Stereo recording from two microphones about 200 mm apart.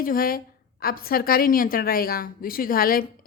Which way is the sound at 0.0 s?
45° left (ahead or behind).